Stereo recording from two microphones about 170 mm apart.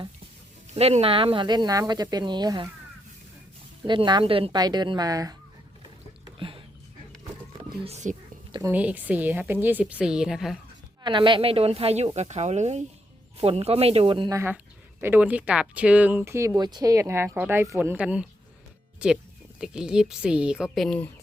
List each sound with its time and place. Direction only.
0.7 s speech: 40° right (ahead or behind)
3.8 s speech: 25° right (ahead or behind)
6.4 s speech: 30° right (ahead or behind)
7.9 s speech: 40° right (ahead or behind)
8.7 s a woman's voice: 10° right (ahead or behind)
11.0 s speech: 30° right (ahead or behind)
14.3 s a woman's voice: 15° right (ahead or behind); by 21.1 s 5° left (ahead or behind)